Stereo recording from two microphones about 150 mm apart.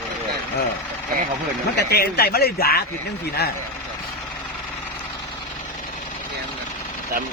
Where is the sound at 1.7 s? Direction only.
90° left.